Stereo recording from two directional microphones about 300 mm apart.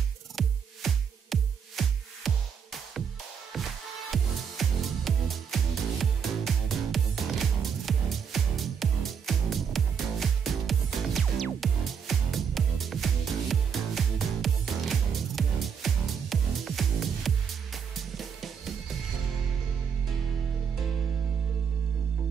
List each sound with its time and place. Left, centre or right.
0.4 s music: centre